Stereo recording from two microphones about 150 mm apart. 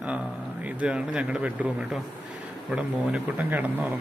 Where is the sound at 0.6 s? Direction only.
10° right (ahead or behind).